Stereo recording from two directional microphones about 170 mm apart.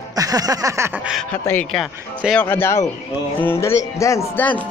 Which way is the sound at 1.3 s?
10° left (ahead or behind).